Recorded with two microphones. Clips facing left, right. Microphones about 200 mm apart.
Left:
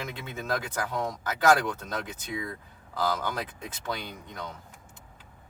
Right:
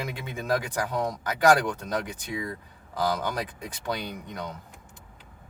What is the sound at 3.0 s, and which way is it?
Speech, 20° right (ahead or behind).